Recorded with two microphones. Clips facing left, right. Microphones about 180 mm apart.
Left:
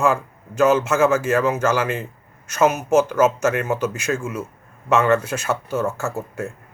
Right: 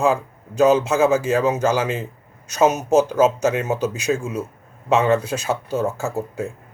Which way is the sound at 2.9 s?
35° right (ahead or behind).